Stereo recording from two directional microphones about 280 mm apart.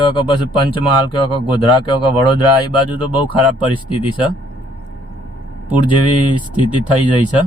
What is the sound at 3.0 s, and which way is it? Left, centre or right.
Speech, centre.